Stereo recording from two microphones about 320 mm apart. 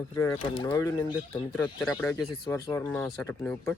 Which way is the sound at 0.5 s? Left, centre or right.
Centre.